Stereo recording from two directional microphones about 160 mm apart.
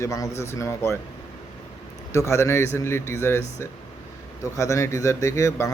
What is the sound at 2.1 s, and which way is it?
A man's voice, 20° left (ahead or behind).